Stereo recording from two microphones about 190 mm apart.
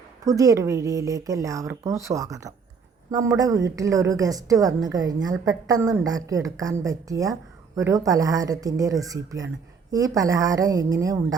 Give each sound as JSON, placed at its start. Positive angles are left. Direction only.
{"t": 0.3, "sound": "a woman's voice", "side_deg": -15}